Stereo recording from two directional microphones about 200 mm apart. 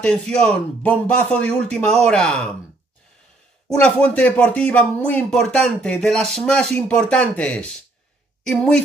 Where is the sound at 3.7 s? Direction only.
5° left (ahead or behind).